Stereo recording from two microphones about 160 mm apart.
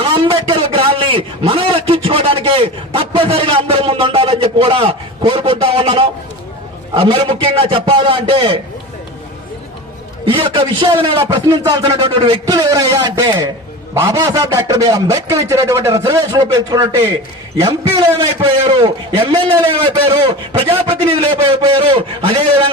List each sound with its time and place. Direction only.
0.0 s a sound: 30° right (ahead or behind)
6.9 s a man's voice: 35° right (ahead or behind)
10.2 s a man's voice: 30° right (ahead or behind)